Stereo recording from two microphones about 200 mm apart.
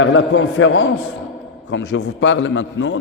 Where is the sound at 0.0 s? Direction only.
70° left (ahead or behind).